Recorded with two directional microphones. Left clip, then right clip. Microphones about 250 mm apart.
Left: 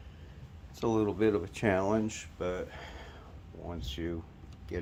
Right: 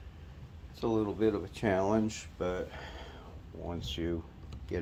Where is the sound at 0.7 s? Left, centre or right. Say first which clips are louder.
Left 2 dB; left.